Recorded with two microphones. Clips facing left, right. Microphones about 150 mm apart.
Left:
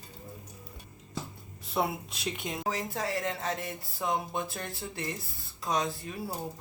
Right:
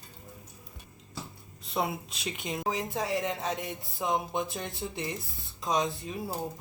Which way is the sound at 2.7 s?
20° right (ahead or behind).